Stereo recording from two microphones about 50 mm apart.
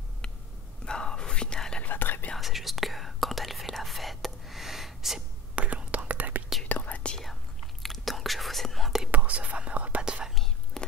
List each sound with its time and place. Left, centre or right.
0.8 s whispering: centre
1.9 s whispering: left
2.3 s whispering: centre
5.6 s whispering: right
6.7 s whispering: left
7.2 s whispering: centre
9.1 s whispering: right
10.3 s whispering: centre